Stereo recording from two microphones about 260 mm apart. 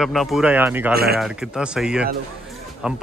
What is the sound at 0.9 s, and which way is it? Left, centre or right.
Speech, right.